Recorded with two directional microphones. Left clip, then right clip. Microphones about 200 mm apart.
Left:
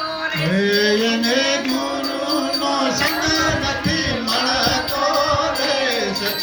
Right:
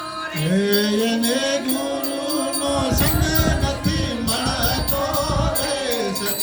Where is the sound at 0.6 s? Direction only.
65° right (ahead or behind).